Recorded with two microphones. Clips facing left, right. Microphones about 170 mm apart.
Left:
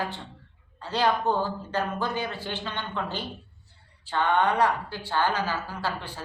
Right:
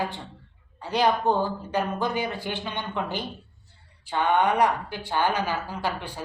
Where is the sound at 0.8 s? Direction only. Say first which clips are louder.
Right 2 dB; 15° right (ahead or behind).